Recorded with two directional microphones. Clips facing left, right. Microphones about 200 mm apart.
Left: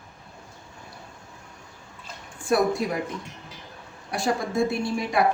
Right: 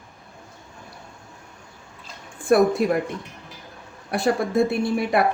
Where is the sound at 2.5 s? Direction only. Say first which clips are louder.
Right 5 dB; 60° right (ahead or behind).